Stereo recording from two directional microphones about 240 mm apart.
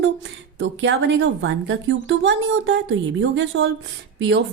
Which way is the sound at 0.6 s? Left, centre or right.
Right.